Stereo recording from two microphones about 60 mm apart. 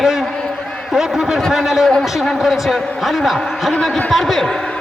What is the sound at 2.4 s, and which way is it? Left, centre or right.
A man's voice, centre.